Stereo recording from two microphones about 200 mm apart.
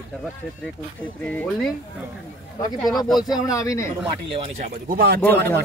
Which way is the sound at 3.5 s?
15° left (ahead or behind).